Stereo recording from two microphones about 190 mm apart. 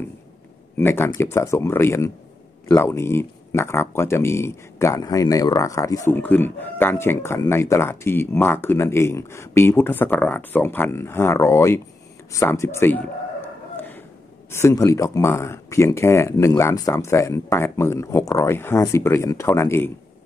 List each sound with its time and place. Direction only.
0.7 s speech: 10° left (ahead or behind)
13.7 s a sound: 10° left (ahead or behind)
14.5 s speech: 15° left (ahead or behind)